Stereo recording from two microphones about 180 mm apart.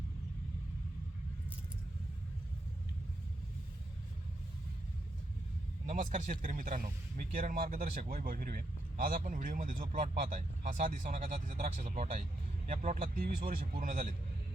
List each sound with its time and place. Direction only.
5.8 s speech: 45° right (ahead or behind)